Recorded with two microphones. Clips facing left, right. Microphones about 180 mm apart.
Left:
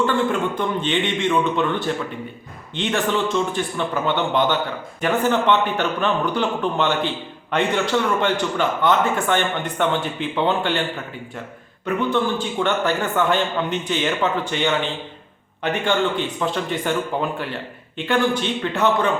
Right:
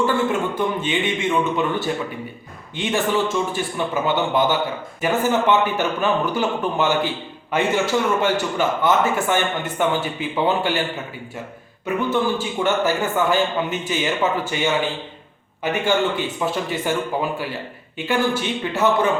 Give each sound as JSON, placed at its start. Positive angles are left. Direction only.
{"t": 0.0, "sound": "speech", "side_deg": -5}
{"t": 11.9, "sound": "speech", "side_deg": -5}